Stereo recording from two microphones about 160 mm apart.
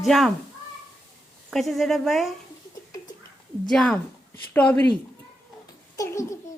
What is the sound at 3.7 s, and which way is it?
A woman's voice, 5° left (ahead or behind).